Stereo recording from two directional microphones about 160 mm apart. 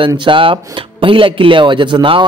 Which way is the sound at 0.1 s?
30° right (ahead or behind).